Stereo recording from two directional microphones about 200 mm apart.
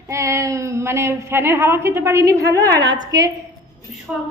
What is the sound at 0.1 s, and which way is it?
A woman's voice, 15° right (ahead or behind).